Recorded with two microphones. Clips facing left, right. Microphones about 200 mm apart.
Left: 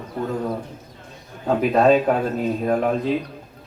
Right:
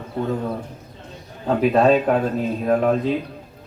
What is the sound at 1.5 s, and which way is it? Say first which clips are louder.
Speech: even; centre (ahead or behind).